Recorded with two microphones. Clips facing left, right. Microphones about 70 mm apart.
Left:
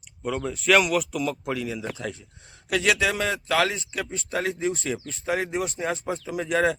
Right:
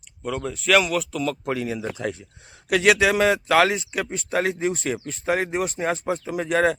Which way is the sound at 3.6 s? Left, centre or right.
Right.